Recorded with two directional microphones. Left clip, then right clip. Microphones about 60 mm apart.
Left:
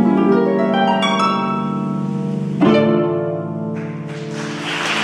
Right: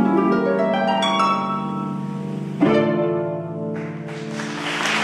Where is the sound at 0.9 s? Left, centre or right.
Left.